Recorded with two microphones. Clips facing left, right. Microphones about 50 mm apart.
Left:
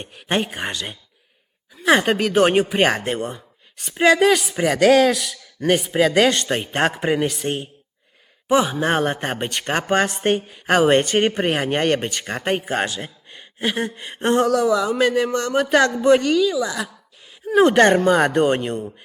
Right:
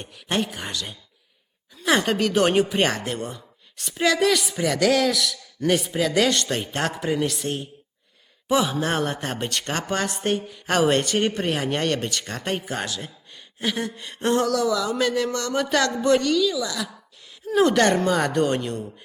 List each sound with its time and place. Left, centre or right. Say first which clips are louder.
0.0 s a woman's voice: left 3 dB; left
1.9 s speech: left 5 dB; left
2.1 s speech: left 3 dB; centre; by 5.2 s left
5.5 s a man's voice: left 4 dB; left
8.4 s speech: left 4 dB; centre
9.0 s a woman's voice: left 4 dB; left
10.7 s speech: left 5 dB; left